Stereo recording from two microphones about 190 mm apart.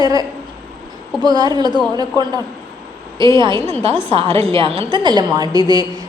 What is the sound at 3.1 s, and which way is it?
A woman's voice, 25° right (ahead or behind).